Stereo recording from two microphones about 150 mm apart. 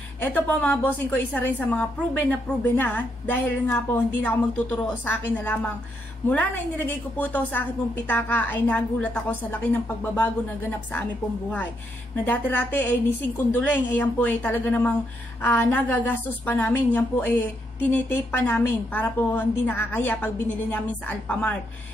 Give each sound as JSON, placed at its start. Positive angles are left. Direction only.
{"t": 0.2, "sound": "a woman's voice", "side_deg": 10}
{"t": 12.3, "sound": "a woman's voice", "side_deg": 10}